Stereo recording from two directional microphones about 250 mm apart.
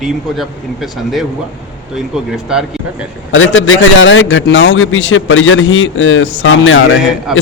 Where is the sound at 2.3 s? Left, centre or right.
Centre.